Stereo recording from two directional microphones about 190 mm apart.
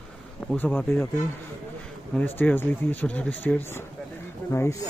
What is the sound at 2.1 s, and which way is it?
Speech, 10° left (ahead or behind).